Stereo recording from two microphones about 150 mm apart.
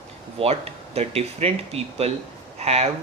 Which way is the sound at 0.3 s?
40° right (ahead or behind).